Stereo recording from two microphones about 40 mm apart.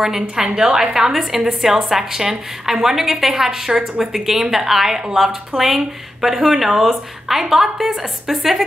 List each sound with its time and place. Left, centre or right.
0.0 s a woman's voice: centre
0.9 s a woman's voice: centre